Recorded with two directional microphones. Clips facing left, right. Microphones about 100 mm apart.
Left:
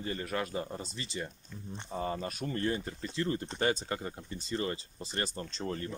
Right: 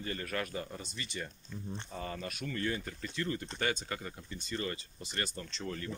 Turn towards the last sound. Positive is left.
turn(degrees=35)  # may be behind; listen again after turning